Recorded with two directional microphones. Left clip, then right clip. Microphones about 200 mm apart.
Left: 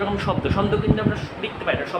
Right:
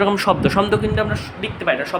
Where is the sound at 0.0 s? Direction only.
60° right (ahead or behind).